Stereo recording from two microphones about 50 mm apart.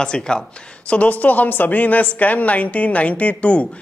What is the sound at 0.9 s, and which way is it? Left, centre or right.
Speech, left.